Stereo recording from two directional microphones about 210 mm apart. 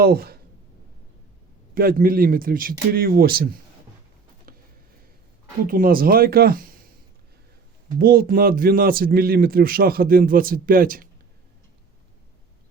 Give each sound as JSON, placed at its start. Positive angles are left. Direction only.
{"t": 0.0, "sound": "a man's voice", "side_deg": -45}
{"t": 1.7, "sound": "a man's voice", "side_deg": -45}
{"t": 4.5, "sound": "a sound", "side_deg": -45}
{"t": 5.6, "sound": "a man's voice", "side_deg": -40}
{"t": 7.9, "sound": "a man's voice", "side_deg": -45}